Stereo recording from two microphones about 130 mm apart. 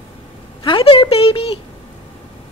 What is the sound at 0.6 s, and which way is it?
Speech, 40° left (ahead or behind).